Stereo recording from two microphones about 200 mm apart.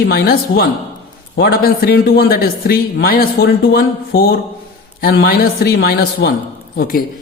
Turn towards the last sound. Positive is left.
turn(degrees=45)  # may be behind; listen again after turning